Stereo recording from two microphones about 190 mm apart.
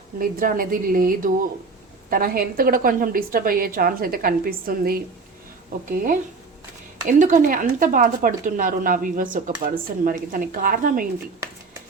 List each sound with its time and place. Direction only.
0.2 s speech: 45° right (ahead or behind)